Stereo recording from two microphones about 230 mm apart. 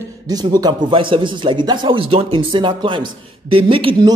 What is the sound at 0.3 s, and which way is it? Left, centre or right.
A man's voice, centre.